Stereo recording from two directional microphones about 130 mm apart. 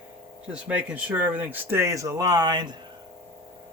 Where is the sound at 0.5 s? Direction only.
10° right (ahead or behind); by 2.7 s 35° right (ahead or behind).